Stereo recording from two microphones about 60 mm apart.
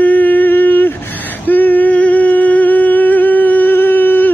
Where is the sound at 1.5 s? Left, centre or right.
Left.